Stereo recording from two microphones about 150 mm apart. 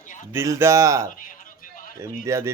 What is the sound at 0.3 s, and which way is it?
Speech, 20° right (ahead or behind).